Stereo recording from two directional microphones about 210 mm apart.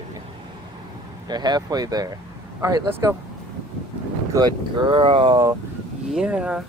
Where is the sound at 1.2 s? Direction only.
20° right (ahead or behind).